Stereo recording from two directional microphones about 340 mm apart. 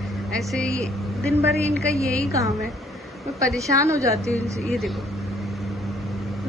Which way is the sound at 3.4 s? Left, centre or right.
Centre.